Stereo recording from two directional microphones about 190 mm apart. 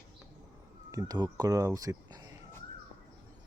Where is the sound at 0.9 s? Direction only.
20° right (ahead or behind).